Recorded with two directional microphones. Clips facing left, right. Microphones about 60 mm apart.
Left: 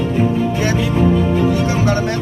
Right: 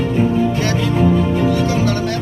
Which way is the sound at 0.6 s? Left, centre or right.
Centre.